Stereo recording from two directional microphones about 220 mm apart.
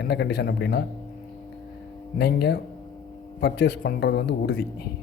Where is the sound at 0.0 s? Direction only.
50° left (ahead or behind).